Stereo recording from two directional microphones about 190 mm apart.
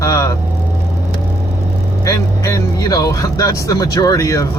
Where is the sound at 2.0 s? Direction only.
15° left (ahead or behind).